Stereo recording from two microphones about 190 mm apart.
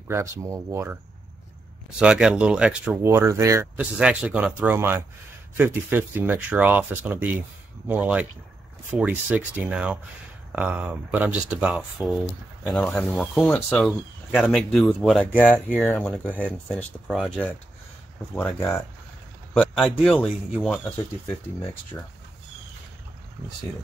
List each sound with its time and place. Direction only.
0.1 s speech: 15° right (ahead or behind)
2.0 s speech: 5° right (ahead or behind)
15.7 s speech: 5° left (ahead or behind)